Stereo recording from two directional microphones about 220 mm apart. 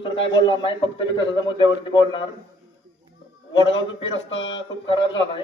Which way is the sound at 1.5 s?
20° left (ahead or behind).